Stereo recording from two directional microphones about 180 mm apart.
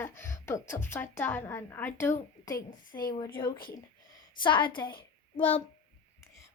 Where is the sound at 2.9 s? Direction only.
50° left (ahead or behind).